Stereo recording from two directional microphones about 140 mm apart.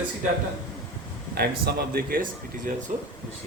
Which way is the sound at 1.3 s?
90° right.